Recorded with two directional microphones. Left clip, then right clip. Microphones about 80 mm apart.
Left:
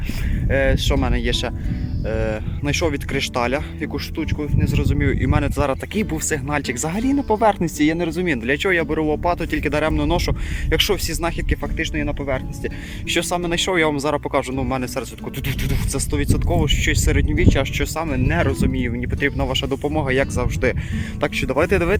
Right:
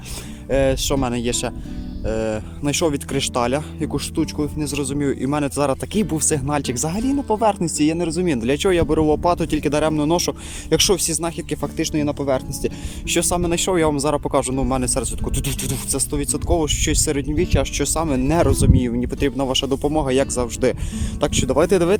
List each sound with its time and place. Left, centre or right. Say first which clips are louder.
0.5 s speech: right 1 dB; right
4.1 s speech: right 3 dB; right
4.9 s speech: right 1 dB; right
6.8 s speech: left 1 dB; centre
8.3 s speech: even; right
11.8 s speech: right 4 dB; right
13.1 s speech: right 1 dB; right
17.7 s speech: right 2 dB; right
21.5 s speech: right 2 dB; right